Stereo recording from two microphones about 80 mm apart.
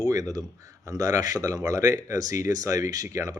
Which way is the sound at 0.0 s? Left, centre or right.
Right.